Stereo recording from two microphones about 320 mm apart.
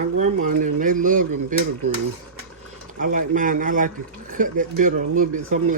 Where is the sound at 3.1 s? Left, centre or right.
Right.